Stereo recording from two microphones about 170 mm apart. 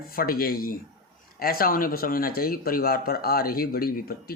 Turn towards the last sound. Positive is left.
turn(degrees=60)  # may be behind; listen again after turning